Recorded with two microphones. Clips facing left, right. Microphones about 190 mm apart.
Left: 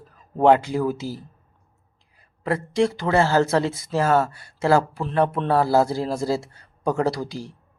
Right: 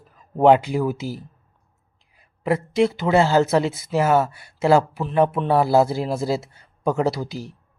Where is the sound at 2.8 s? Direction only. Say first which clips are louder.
Right 2 dB; 20° right (ahead or behind).